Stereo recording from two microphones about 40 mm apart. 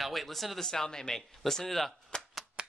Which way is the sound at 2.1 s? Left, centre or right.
Centre.